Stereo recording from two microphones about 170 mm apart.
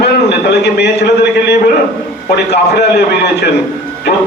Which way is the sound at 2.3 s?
75° left (ahead or behind).